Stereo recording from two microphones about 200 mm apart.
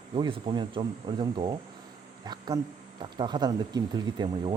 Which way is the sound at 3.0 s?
20° right (ahead or behind).